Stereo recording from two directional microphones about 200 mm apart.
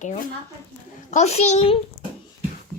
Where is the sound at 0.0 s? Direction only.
35° left (ahead or behind).